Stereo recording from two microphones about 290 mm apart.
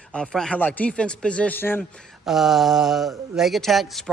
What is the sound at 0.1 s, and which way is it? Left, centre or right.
Speech, centre.